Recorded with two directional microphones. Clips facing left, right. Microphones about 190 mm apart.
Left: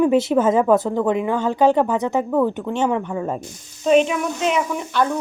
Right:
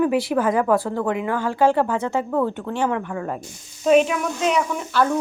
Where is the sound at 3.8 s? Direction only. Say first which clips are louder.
Even; 5° right (ahead or behind).